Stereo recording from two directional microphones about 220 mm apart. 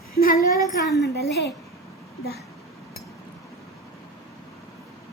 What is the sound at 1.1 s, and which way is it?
Speech, 50° left (ahead or behind).